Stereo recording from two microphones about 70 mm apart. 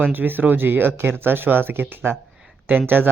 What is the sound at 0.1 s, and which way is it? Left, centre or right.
Speech, right.